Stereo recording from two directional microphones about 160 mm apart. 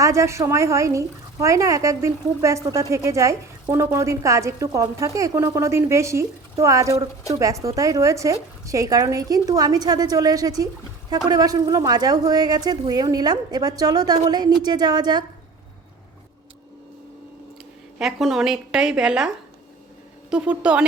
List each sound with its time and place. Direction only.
0.0 s speech: 20° right (ahead or behind)
18.0 s a woman's voice: centre (ahead or behind)
20.3 s a woman's voice: 5° right (ahead or behind)